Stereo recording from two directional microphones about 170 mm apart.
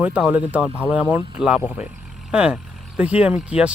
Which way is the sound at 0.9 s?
10° right (ahead or behind).